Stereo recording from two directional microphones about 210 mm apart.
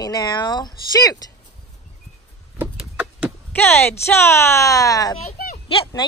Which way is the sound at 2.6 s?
5° right (ahead or behind).